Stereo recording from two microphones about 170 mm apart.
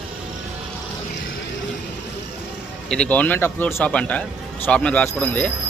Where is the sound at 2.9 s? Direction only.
5° left (ahead or behind).